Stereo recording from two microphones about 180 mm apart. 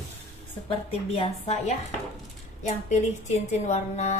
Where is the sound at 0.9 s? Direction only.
35° left (ahead or behind).